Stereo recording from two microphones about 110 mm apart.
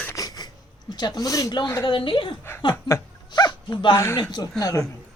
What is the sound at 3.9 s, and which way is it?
Speech, 25° left (ahead or behind).